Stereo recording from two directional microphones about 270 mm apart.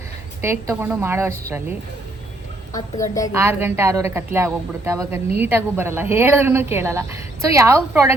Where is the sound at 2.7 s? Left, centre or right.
Centre.